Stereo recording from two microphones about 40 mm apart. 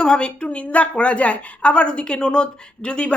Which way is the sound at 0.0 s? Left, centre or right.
Left.